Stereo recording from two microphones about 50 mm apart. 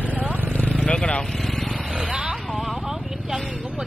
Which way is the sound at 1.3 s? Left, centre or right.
Centre.